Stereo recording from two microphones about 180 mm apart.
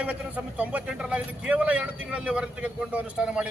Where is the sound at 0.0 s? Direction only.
5° right (ahead or behind).